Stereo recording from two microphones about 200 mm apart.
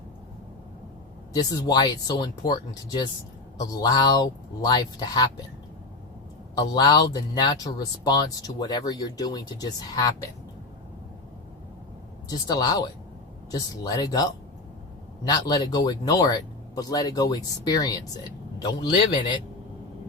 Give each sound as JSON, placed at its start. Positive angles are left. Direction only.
{"t": 1.3, "sound": "speech", "side_deg": 20}
{"t": 6.6, "sound": "speech", "side_deg": 20}
{"t": 12.3, "sound": "speech", "side_deg": 20}
{"t": 15.3, "sound": "speech", "side_deg": 20}